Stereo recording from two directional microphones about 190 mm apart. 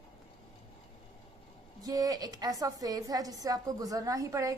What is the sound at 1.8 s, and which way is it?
A woman's voice, 20° right (ahead or behind).